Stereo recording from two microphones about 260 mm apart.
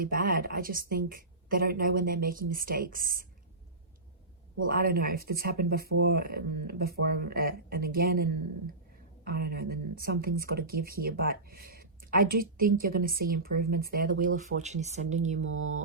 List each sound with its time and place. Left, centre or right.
0.0 s a woman's voice: right
4.7 s a woman's voice: right
15.4 s a sound: right